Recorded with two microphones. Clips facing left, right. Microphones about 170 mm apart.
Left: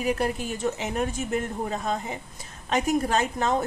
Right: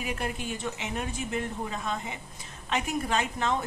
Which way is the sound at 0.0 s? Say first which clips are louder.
Left 7 dB; 40° left (ahead or behind).